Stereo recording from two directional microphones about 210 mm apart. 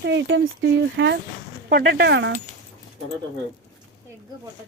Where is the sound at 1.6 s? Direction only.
50° right (ahead or behind).